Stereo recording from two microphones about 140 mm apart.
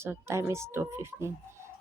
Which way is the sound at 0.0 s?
20° right (ahead or behind).